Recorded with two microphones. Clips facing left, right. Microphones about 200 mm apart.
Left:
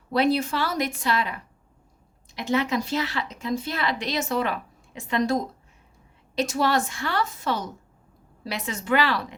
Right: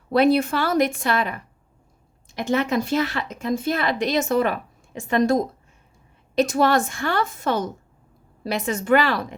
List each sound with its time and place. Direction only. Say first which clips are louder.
0.1 s speech: right 5 dB; 55° right (ahead or behind)